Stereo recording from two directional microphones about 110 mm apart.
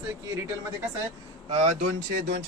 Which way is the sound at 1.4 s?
70° right (ahead or behind).